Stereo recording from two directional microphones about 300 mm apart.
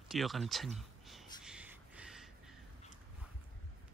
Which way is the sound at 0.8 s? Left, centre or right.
Centre.